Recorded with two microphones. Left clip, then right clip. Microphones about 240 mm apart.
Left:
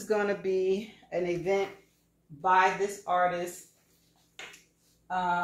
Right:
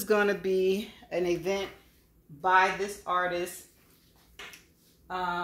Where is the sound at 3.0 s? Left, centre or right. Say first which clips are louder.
Left 2 dB; right.